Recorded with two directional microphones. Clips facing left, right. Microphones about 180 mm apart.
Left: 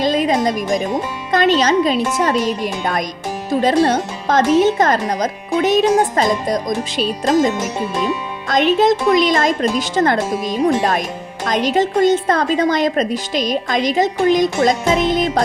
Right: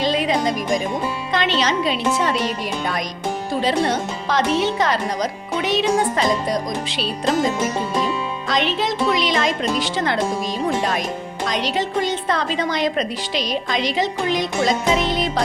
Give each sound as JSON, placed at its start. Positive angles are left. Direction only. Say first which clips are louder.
{"t": 0.0, "sound": "music", "louder": "left 4 dB", "side_deg": 45}
{"t": 1.3, "sound": "a woman's voice", "louder": "left 7 dB", "side_deg": 45}
{"t": 8.4, "sound": "a woman's voice", "louder": "left 9 dB", "side_deg": 45}